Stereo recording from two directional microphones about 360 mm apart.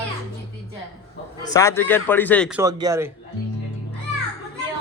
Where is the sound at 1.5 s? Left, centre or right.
Centre.